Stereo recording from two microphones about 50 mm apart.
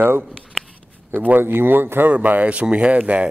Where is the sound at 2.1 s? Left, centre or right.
Right.